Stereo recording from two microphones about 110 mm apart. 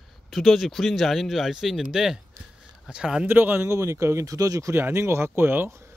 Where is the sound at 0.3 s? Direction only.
Centre (ahead or behind).